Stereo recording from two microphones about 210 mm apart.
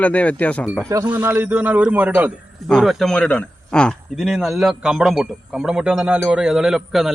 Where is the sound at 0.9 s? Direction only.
15° right (ahead or behind).